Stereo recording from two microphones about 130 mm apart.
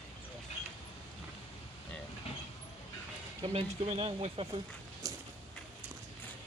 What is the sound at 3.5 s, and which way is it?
Speech, 50° right (ahead or behind).